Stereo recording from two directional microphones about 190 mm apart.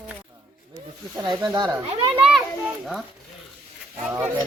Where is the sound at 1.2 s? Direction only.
20° right (ahead or behind).